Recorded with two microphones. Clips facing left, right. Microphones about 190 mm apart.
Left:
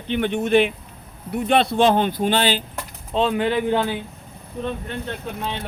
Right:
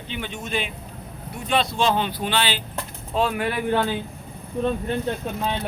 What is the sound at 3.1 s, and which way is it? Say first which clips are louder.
Speech: left 4 dB; 20° left (ahead or behind).